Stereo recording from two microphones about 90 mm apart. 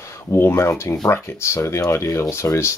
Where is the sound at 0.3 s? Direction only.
30° left (ahead or behind).